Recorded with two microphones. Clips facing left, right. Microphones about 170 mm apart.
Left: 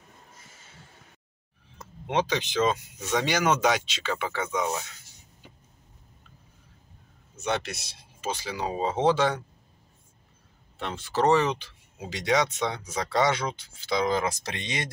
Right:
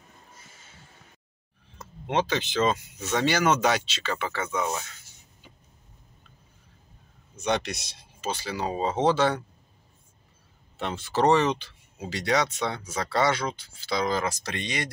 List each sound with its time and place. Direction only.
2.0 s speech: 10° left (ahead or behind)
4.6 s speech: centre (ahead or behind)
7.3 s speech: 5° left (ahead or behind)
10.8 s speech: 5° right (ahead or behind); by 14.9 s 20° left (ahead or behind)